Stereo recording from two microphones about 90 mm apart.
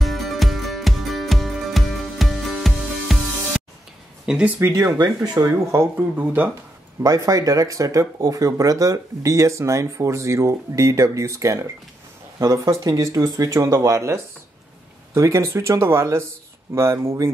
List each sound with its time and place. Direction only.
0.0 s music: centre (ahead or behind)
4.3 s speech: 10° right (ahead or behind)
4.6 s speech: 30° right (ahead or behind)
4.8 s speech: 50° right (ahead or behind)
5.7 s speech: 25° right (ahead or behind)
7.0 s speech: 40° right (ahead or behind)